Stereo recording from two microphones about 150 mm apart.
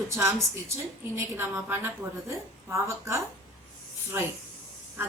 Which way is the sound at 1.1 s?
15° right (ahead or behind).